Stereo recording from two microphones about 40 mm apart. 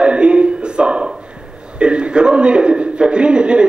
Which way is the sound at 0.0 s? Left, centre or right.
Right.